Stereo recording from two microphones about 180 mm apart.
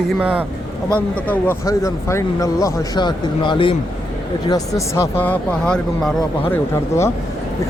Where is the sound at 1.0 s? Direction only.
10° left (ahead or behind).